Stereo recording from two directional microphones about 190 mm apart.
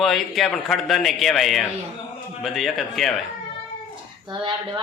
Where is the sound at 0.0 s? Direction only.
Centre (ahead or behind).